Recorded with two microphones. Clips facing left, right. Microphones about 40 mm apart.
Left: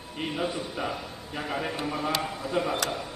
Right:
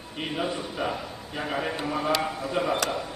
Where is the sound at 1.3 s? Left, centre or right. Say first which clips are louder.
Right 2 dB; centre.